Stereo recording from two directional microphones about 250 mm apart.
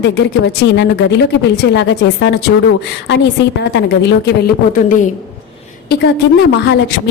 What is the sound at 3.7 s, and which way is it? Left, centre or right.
Speech, left.